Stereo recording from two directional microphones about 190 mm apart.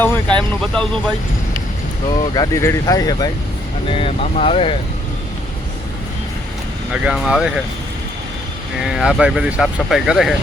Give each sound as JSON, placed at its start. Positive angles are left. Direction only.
{"t": 0.6, "sound": "speech", "side_deg": 5}
{"t": 2.0, "sound": "speech", "side_deg": 20}
{"t": 6.9, "sound": "speech", "side_deg": -5}
{"t": 8.8, "sound": "speech", "side_deg": -5}